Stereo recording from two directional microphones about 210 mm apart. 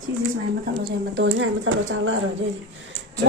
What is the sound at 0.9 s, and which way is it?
A woman's voice, 55° right (ahead or behind).